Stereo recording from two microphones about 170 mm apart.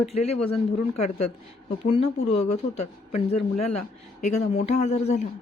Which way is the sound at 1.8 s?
35° left (ahead or behind).